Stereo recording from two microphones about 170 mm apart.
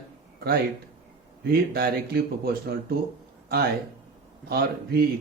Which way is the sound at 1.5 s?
60° right (ahead or behind).